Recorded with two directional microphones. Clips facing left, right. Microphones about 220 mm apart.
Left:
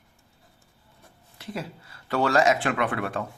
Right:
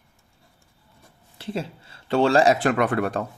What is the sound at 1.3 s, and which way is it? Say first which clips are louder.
A man's voice: right 5 dB; 30° right (ahead or behind).